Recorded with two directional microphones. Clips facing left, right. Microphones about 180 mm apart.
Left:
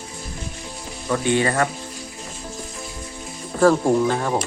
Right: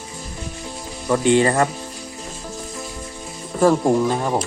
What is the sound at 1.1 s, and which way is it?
Speech, 25° right (ahead or behind).